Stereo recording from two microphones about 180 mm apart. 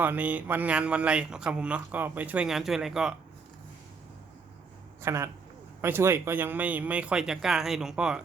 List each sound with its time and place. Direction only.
0.0 s speech: 10° right (ahead or behind)
5.0 s speech: 15° right (ahead or behind)